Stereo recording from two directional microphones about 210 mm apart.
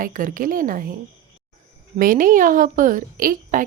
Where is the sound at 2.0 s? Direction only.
40° right (ahead or behind).